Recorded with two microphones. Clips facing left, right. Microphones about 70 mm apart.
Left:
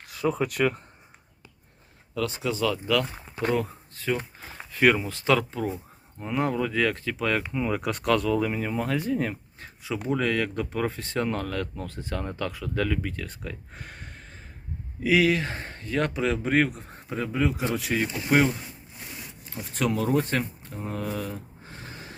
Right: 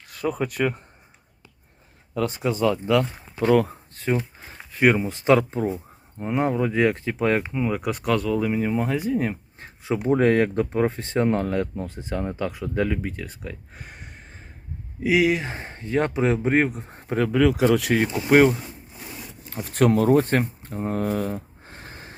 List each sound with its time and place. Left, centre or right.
0.1 s speech: centre
2.1 s speech: right
3.5 s speech: right
3.9 s speech: right
4.8 s speech: centre
7.5 s speech: centre
9.3 s speech: right
13.2 s a sound: centre
15.0 s speech: centre
17.2 s speech: right
19.7 s speech: right